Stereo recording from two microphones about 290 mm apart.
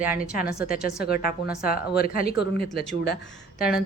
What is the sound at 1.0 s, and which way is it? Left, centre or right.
Speech, left.